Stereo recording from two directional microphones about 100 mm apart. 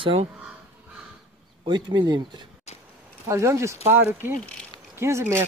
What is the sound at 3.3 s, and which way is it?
Speech, 30° right (ahead or behind).